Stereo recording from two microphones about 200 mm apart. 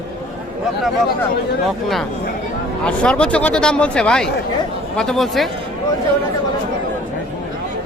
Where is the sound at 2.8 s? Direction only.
5° left (ahead or behind).